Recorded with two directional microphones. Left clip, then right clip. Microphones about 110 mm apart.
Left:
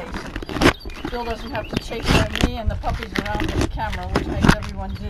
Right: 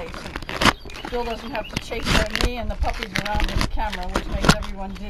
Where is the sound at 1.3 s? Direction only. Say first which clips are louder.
Left 1 dB; centre (ahead or behind).